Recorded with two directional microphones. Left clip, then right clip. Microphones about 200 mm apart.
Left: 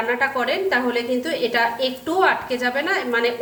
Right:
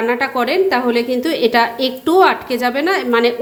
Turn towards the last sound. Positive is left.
turn(degrees=-45)  # may be behind; listen again after turning